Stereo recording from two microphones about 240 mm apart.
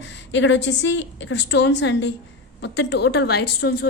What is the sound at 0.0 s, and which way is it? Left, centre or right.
A woman's voice, left.